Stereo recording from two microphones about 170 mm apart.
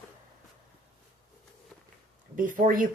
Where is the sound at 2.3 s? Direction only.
50° right (ahead or behind).